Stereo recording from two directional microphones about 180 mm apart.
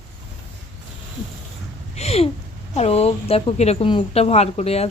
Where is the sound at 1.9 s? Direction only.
35° left (ahead or behind).